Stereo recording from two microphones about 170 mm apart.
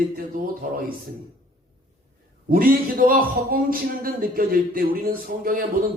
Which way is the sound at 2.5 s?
60° right (ahead or behind).